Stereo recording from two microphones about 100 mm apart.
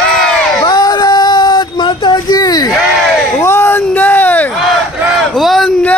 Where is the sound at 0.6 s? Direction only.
40° left (ahead or behind).